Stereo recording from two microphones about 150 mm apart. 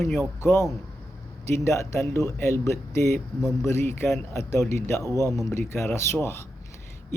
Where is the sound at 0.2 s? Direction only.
15° left (ahead or behind).